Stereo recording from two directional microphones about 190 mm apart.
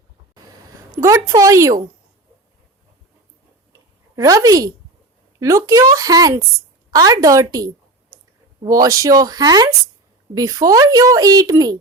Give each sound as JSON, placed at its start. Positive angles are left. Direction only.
{"t": 1.3, "sound": "speech", "side_deg": -15}
{"t": 3.7, "sound": "a sound", "side_deg": -20}
{"t": 5.4, "sound": "speech", "side_deg": -15}